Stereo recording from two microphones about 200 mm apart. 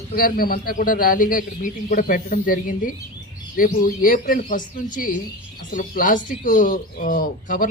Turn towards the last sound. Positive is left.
turn(degrees=40)  # may be behind; listen again after turning